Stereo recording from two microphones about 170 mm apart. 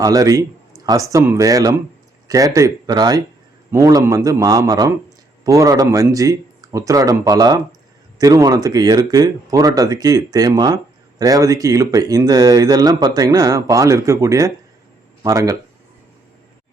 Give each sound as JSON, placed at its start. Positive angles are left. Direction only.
{"t": 0.0, "sound": "speech", "side_deg": -20}